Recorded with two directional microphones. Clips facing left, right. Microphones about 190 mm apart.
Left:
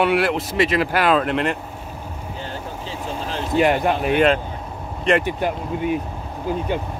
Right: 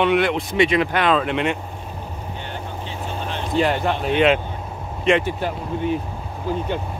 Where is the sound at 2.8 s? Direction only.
35° left (ahead or behind).